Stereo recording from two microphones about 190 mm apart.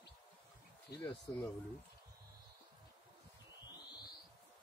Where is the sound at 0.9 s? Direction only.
60° left (ahead or behind).